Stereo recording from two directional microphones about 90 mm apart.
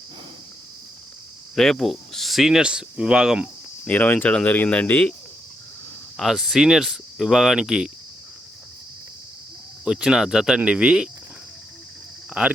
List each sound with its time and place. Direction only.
1.5 s speech: 5° left (ahead or behind)
3.8 s speech: 20° left (ahead or behind)
6.1 s speech: centre (ahead or behind)
9.8 s speech: 5° right (ahead or behind)
12.3 s speech: 15° right (ahead or behind)